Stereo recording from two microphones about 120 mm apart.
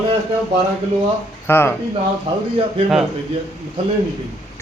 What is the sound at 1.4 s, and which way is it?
Speech, 20° left (ahead or behind).